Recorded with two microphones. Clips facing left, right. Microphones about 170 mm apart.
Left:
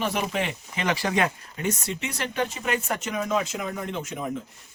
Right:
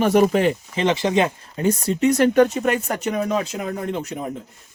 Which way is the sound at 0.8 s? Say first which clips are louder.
Right 6 dB; 25° right (ahead or behind).